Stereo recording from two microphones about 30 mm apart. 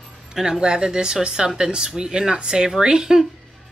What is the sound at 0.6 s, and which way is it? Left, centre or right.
Speech, right.